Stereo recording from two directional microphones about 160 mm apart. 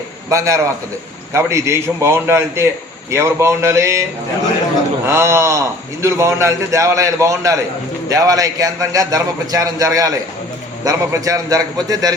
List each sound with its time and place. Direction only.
0.3 s a man's voice: 20° right (ahead or behind)
5.0 s a man's voice: 15° right (ahead or behind)